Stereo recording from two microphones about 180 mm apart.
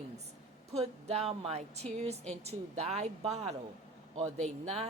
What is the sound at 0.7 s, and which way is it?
Speech, 35° right (ahead or behind).